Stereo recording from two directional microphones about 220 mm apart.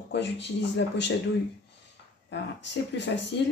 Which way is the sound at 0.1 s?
50° left (ahead or behind).